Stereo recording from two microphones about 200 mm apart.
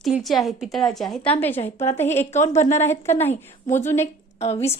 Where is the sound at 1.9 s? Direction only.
35° left (ahead or behind).